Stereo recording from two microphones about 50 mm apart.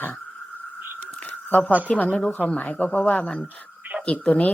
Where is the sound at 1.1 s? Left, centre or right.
Left.